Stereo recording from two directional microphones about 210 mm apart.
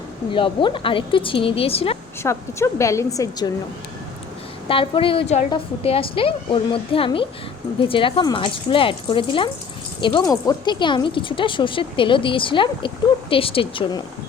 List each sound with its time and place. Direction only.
0.3 s speech: 25° left (ahead or behind)
2.2 s a woman's voice: 15° left (ahead or behind)
4.7 s speech: 25° left (ahead or behind)